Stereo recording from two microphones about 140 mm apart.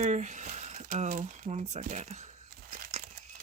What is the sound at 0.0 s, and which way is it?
Speech, 55° right (ahead or behind).